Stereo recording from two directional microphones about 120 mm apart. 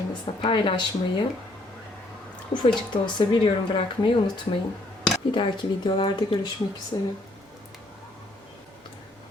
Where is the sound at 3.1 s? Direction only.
40° left (ahead or behind).